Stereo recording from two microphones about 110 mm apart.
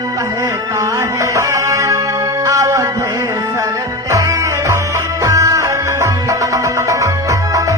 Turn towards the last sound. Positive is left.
turn(degrees=-30)  # may be behind; listen again after turning